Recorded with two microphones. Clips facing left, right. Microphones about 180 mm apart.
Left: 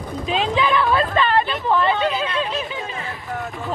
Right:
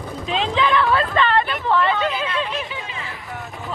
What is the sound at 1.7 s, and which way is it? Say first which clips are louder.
Chatter: left 1 dB; 15° left (ahead or behind).